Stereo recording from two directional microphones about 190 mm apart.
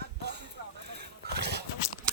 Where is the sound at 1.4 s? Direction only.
60° right (ahead or behind).